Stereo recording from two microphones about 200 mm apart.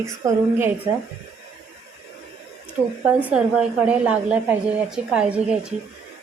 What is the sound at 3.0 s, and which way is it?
Speech, 5° right (ahead or behind).